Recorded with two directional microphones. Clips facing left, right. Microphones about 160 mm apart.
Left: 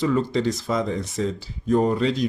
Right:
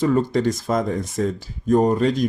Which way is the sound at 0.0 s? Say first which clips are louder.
Right 3 dB; 50° right (ahead or behind).